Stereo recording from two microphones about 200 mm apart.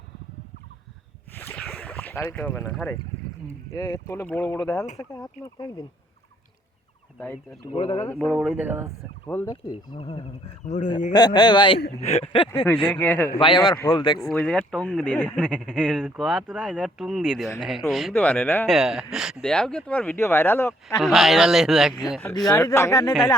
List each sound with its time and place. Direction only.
1.4 s boat: 10° left (ahead or behind)
3.7 s speech: 20° left (ahead or behind)
7.7 s speech: 30° left (ahead or behind)
8.0 s speech: 5° left (ahead or behind)
8.4 s speech: 10° right (ahead or behind)
9.5 s speech: 25° left (ahead or behind)
10.7 s speech: 35° left (ahead or behind)
11.1 s speech: 20° left (ahead or behind)
12.5 s speech: 10° left (ahead or behind)
13.4 s speech: 25° left (ahead or behind)
14.2 s speech: centre (ahead or behind)
21.0 s speech: centre (ahead or behind)
22.2 s speech: 10° left (ahead or behind)